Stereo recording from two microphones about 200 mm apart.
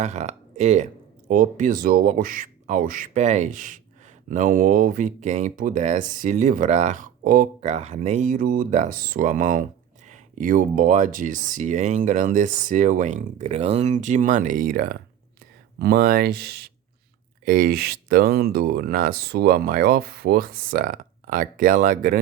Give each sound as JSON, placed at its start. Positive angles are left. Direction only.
{"t": 0.0, "sound": "speech", "side_deg": -35}